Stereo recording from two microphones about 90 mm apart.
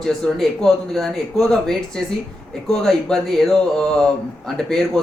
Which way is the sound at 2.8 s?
5° left (ahead or behind).